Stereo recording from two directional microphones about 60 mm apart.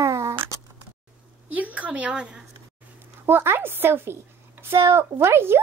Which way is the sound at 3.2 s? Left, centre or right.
Right.